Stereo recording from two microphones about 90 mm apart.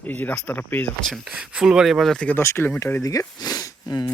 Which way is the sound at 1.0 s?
5° left (ahead or behind).